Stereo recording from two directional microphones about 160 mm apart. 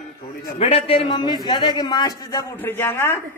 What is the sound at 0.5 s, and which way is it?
A man's voice, 35° left (ahead or behind).